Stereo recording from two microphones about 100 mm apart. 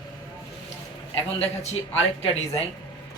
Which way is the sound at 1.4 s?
90° left.